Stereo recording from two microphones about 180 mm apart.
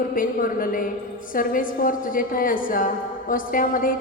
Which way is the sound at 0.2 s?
50° left (ahead or behind).